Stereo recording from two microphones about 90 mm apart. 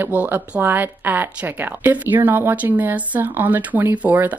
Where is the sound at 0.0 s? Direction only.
20° right (ahead or behind).